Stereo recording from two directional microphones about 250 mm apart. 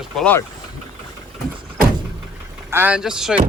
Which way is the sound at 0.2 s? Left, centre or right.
Centre.